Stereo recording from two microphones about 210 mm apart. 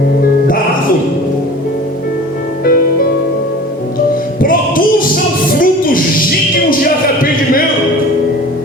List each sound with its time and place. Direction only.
2.6 s music: 45° left (ahead or behind)
4.4 s music: 40° left (ahead or behind)